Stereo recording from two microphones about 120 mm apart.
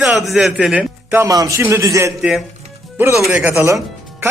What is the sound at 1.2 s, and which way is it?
Speech, 30° right (ahead or behind).